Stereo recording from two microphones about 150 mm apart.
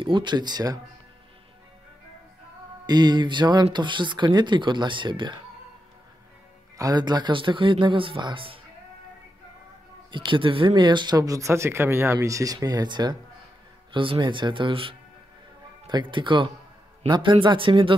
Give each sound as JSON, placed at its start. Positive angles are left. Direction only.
{"t": 0.0, "sound": "speech", "side_deg": -30}
{"t": 2.9, "sound": "speech", "side_deg": -30}
{"t": 6.8, "sound": "speech", "side_deg": -25}
{"t": 10.1, "sound": "speech", "side_deg": -35}